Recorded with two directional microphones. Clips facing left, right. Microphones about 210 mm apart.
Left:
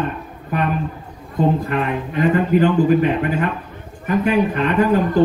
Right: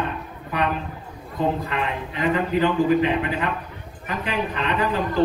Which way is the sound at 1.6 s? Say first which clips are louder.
Left 6 dB; 50° left (ahead or behind).